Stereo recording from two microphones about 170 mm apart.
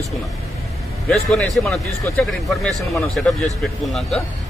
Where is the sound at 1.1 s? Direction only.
Centre (ahead or behind).